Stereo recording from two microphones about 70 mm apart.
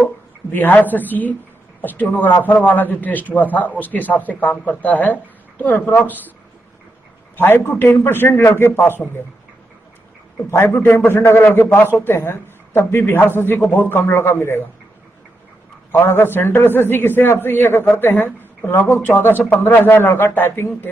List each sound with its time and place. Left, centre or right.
0.5 s a man's voice: left
7.3 s a man's voice: left
10.5 s a man's voice: left
15.9 s a man's voice: left